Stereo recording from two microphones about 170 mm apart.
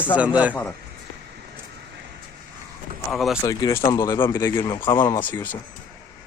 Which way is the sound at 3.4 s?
20° left (ahead or behind).